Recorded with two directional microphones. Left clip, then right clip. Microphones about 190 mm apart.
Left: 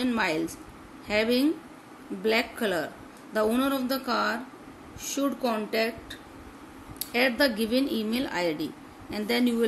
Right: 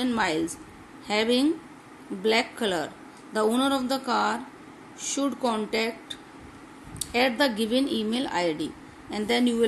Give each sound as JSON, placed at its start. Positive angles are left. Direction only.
{"t": 0.0, "sound": "a woman's voice", "side_deg": -15}